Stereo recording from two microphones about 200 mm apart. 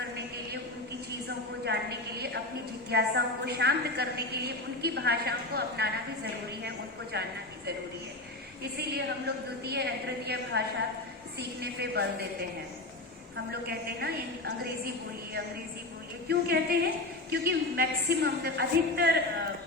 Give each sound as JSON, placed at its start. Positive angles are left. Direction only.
{"t": 1.6, "sound": "a woman's voice", "side_deg": -55}
{"t": 9.0, "sound": "a woman's voice", "side_deg": -55}
{"t": 13.3, "sound": "a woman's voice", "side_deg": -50}